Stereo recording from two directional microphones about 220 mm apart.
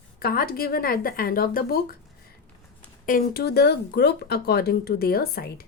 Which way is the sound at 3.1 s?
45° left (ahead or behind).